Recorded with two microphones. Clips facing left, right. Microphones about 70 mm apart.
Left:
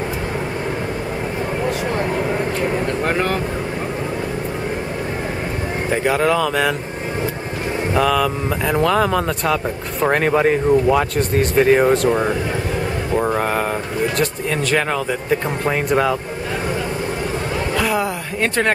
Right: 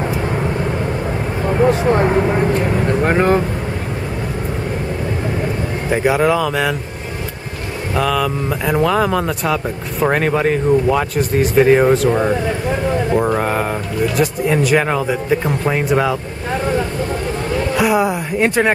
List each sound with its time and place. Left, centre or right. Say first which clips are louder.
1.6 s vehicle: right 10 dB; right
2.9 s speech: right 5 dB; right
5.9 s speech: right 3 dB; centre
7.9 s speech: even; centre
17.7 s speech: right 5 dB; centre